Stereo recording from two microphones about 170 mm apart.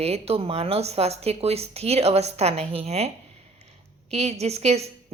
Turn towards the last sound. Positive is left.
turn(degrees=-40)  # may be behind; listen again after turning